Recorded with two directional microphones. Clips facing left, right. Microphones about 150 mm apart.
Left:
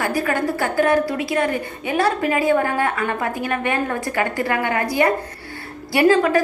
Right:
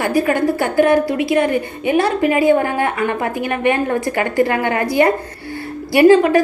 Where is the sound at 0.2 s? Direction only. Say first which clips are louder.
Right 8 dB; 20° right (ahead or behind).